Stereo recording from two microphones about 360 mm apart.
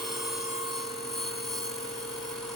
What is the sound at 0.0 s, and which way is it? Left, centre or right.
Telephone bell ringing, centre.